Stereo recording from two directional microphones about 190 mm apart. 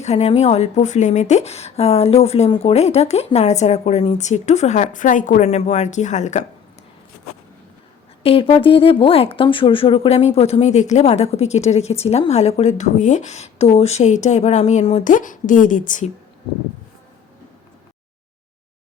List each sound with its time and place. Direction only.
0.0 s speech: 35° left (ahead or behind)
8.2 s speech: 30° left (ahead or behind)